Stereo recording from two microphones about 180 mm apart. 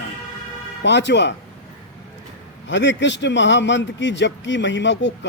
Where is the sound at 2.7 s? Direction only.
80° left.